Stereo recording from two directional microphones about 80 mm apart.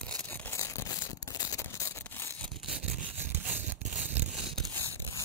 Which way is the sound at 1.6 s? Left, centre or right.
Left.